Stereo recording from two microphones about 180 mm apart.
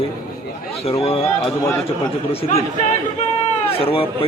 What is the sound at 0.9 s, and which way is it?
Speech, 30° left (ahead or behind).